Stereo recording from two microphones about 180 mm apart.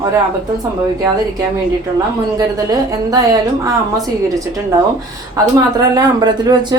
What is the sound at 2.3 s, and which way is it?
A woman's voice, 20° right (ahead or behind).